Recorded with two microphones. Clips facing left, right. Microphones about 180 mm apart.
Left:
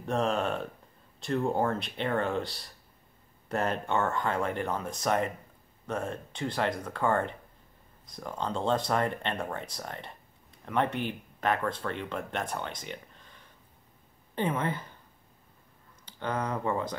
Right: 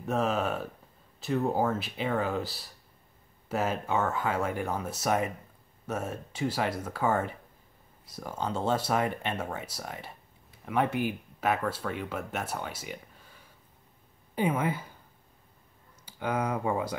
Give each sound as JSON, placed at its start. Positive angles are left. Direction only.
{"t": 0.0, "sound": "speech", "side_deg": -5}
{"t": 16.1, "sound": "speech", "side_deg": -10}